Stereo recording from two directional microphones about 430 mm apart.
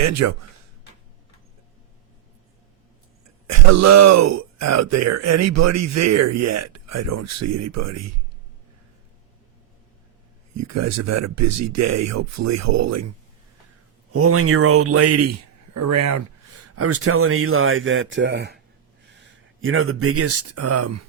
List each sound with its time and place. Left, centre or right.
0.0 s speech: right
3.4 s speech: right
10.5 s speech: right
14.1 s speech: right